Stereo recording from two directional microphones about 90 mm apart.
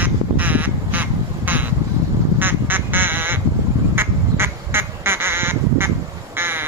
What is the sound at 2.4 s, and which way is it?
Quack, 20° right (ahead or behind).